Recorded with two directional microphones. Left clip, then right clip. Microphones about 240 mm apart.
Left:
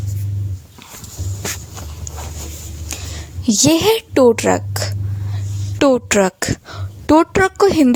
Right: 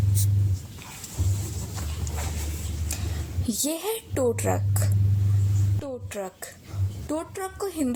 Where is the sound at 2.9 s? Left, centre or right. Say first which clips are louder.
Left 8 dB; left.